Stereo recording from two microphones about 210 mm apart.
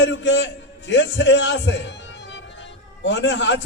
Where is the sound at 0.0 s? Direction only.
60° left (ahead or behind).